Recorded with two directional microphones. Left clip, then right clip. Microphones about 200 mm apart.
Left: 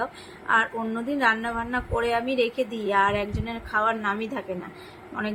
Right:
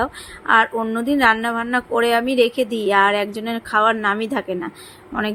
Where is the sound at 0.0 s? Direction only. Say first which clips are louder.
Right 7 dB; 50° right (ahead or behind).